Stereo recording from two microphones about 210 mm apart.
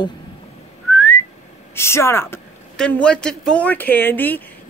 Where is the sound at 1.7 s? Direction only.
10° left (ahead or behind).